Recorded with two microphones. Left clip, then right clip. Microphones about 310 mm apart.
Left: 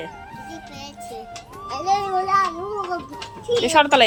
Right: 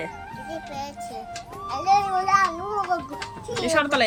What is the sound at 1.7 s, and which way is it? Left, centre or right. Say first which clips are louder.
Speech: right 1 dB; centre.